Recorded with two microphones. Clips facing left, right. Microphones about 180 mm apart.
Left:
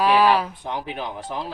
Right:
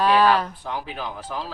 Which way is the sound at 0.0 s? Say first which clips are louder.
Even; 10° left (ahead or behind).